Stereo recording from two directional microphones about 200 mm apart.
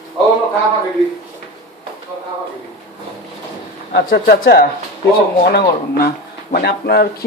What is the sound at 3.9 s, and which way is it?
Speech, 50° left (ahead or behind).